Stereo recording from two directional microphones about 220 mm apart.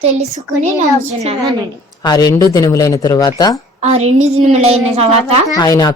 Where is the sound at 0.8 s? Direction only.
30° right (ahead or behind).